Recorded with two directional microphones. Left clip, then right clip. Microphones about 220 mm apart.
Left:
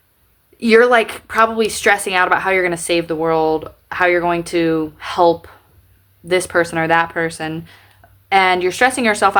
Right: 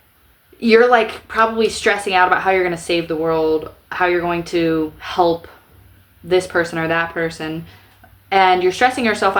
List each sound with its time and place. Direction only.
0.6 s speech: 20° left (ahead or behind)